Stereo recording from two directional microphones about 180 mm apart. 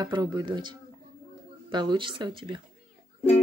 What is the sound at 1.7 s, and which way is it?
Speech, 25° right (ahead or behind).